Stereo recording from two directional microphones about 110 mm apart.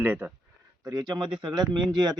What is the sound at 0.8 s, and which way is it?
Speech, 35° right (ahead or behind).